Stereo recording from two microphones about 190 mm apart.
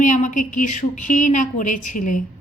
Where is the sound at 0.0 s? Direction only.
40° left (ahead or behind).